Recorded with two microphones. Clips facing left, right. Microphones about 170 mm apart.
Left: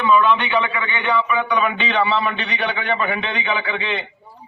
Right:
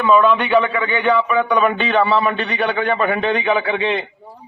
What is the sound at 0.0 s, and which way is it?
A man's voice, 45° right (ahead or behind).